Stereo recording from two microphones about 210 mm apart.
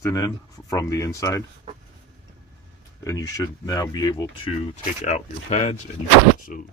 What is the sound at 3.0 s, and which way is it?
Speech, 15° left (ahead or behind).